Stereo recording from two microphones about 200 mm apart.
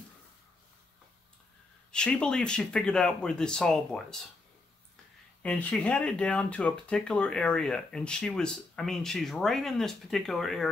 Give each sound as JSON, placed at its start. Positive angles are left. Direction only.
{"t": 1.9, "sound": "speech", "side_deg": 5}
{"t": 5.4, "sound": "speech", "side_deg": 5}